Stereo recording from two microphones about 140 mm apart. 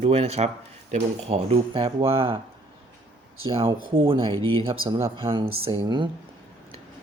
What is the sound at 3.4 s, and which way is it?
Speech, 40° right (ahead or behind).